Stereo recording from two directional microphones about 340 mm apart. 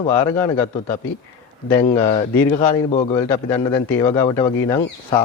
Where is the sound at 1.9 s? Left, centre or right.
Centre.